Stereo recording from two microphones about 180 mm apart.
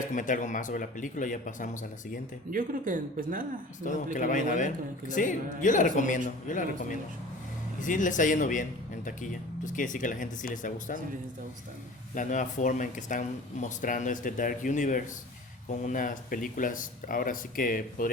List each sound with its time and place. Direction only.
0.1 s a man's voice: 45° left (ahead or behind)
2.5 s speech: 50° right (ahead or behind)
3.8 s a man's voice: 45° left (ahead or behind)
12.1 s a man's voice: 45° left (ahead or behind)